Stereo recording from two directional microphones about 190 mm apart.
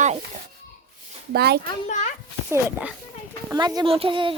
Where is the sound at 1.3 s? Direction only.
55° right (ahead or behind).